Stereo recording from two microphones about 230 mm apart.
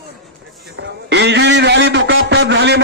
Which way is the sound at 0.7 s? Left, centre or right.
Right.